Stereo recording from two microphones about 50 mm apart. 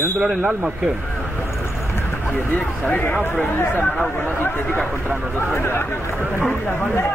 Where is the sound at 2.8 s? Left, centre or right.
Left.